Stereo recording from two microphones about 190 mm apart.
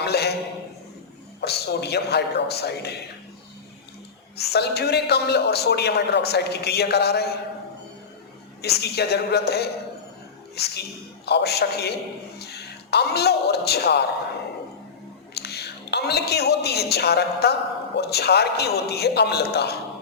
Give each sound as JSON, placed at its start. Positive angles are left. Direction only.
{"t": 0.0, "sound": "a sound", "side_deg": 60}
{"t": 1.4, "sound": "a woman's voice", "side_deg": 60}
{"t": 4.4, "sound": "a woman's voice", "side_deg": 60}
{"t": 8.6, "sound": "a woman's voice", "side_deg": 60}
{"t": 15.4, "sound": "a woman's voice", "side_deg": 60}